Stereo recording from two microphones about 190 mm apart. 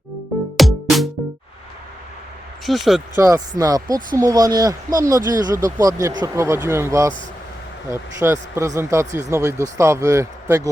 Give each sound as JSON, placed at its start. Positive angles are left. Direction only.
{"t": 0.5, "sound": "music", "side_deg": 0}
{"t": 2.6, "sound": "speech", "side_deg": 0}
{"t": 3.2, "sound": "speech", "side_deg": -15}